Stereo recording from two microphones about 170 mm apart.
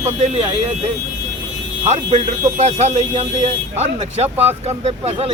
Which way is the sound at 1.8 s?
40° right (ahead or behind).